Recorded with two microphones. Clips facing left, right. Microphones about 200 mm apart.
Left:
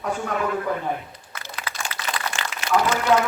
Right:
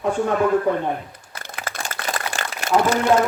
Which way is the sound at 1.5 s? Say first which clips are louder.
Right 3 dB; 50° right (ahead or behind).